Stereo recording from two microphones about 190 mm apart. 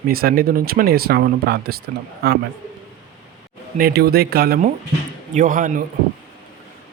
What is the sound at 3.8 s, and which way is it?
Speech, 55° right (ahead or behind).